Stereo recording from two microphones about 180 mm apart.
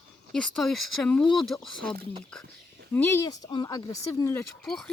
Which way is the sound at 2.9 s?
15° left (ahead or behind).